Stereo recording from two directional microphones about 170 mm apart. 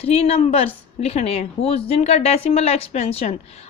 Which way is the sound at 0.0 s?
35° left (ahead or behind).